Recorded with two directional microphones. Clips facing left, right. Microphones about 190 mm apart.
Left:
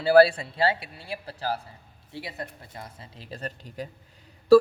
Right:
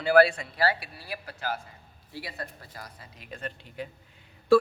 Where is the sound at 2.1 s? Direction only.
20° left (ahead or behind).